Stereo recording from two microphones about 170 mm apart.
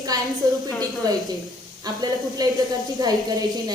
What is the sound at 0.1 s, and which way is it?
Speech, 20° right (ahead or behind).